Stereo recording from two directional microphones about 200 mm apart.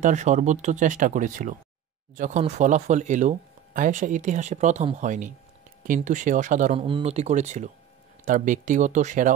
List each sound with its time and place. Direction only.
0.0 s speech: 35° right (ahead or behind)